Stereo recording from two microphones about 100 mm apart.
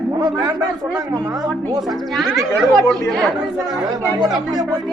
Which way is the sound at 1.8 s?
Centre (ahead or behind).